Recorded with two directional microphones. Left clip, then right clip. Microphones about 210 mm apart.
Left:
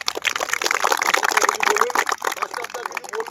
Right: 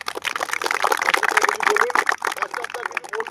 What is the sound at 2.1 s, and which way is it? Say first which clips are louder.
Pour: right 2 dB; centre (ahead or behind).